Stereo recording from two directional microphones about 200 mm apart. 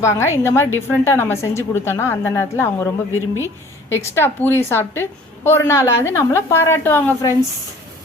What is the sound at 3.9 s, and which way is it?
A woman's voice, 10° left (ahead or behind).